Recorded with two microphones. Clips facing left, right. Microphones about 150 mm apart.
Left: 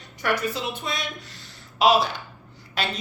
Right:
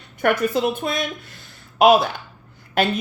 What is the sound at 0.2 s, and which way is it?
A woman's voice, 55° right (ahead or behind).